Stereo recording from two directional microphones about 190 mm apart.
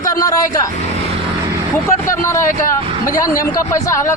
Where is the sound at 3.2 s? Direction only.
20° left (ahead or behind).